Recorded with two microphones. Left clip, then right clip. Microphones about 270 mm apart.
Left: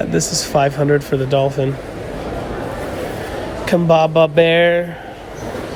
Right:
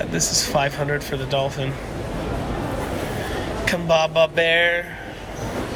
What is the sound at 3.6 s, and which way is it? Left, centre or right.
Speech, centre.